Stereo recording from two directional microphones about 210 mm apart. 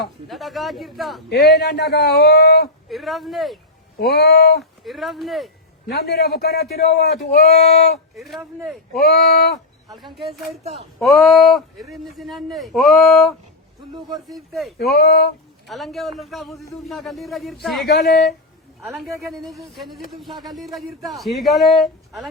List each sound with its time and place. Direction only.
0.3 s a man's voice: centre (ahead or behind)
1.3 s speech: 50° left (ahead or behind)
2.9 s a man's voice: centre (ahead or behind)
3.9 s speech: 45° left (ahead or behind)
4.8 s a man's voice: centre (ahead or behind)
5.9 s speech: 50° left (ahead or behind)
8.1 s a man's voice: centre (ahead or behind)
9.0 s speech: 45° left (ahead or behind)
10.6 s speech: 30° right (ahead or behind)
11.0 s a man's voice: centre (ahead or behind)
14.8 s speech: 50° left (ahead or behind)
15.6 s a man's voice: centre (ahead or behind)
17.8 s speech: 45° left (ahead or behind)
18.8 s a man's voice: centre (ahead or behind)